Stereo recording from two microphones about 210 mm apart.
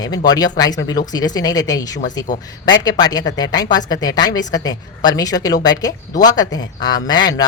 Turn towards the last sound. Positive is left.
turn(degrees=20)  # may be behind; listen again after turning